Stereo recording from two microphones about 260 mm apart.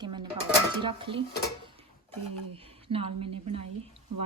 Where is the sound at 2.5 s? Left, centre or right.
Right.